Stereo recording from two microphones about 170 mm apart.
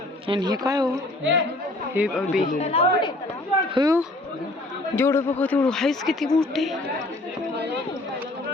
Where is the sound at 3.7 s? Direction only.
25° right (ahead or behind).